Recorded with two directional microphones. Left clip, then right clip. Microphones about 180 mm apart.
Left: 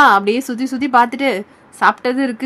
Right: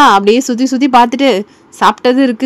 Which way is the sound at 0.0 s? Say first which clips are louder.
Right 4 dB; 30° right (ahead or behind).